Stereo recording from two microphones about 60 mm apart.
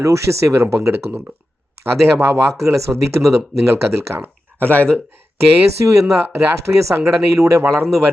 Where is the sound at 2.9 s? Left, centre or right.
Right.